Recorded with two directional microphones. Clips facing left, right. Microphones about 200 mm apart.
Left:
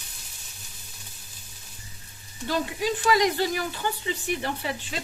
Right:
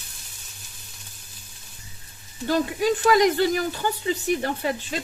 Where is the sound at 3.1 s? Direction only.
50° right (ahead or behind).